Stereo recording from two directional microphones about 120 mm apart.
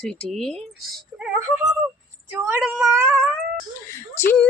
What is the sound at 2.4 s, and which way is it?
Speech, 20° right (ahead or behind).